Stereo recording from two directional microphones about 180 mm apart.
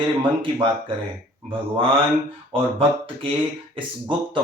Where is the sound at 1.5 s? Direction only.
30° right (ahead or behind).